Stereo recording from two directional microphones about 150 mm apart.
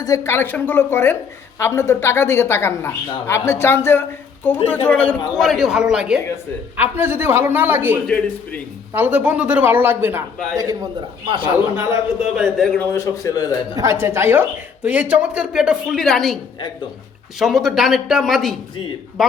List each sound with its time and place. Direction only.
0.0 s a woman's voice: 20° left (ahead or behind); by 7.9 s 15° right (ahead or behind)
8.0 s a woman's voice: 5° left (ahead or behind)
8.9 s a woman's voice: 10° right (ahead or behind)
11.3 s a man's voice: 35° right (ahead or behind)
12.2 s a woman's voice: centre (ahead or behind); by 13.5 s 20° left (ahead or behind)
13.7 s a woman's voice: 20° right (ahead or behind); by 16.4 s centre (ahead or behind)
17.4 s a woman's voice: centre (ahead or behind)